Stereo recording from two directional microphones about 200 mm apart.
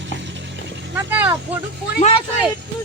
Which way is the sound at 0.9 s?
10° right (ahead or behind).